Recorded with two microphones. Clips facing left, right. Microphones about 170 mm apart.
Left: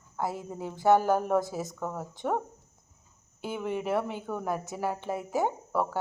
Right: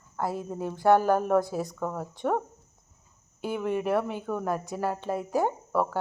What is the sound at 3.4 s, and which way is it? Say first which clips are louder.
A woman's voice: right 3 dB; 15° left (ahead or behind).